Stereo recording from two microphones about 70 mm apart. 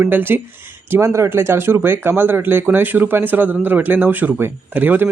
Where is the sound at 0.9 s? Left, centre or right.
Right.